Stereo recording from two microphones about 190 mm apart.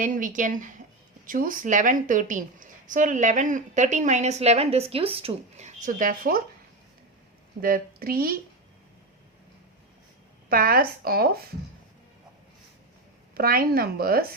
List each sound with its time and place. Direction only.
0.0 s a woman's voice: 45° right (ahead or behind)
7.6 s speech: 50° right (ahead or behind)
10.5 s speech: 50° right (ahead or behind)
13.3 s speech: 50° right (ahead or behind)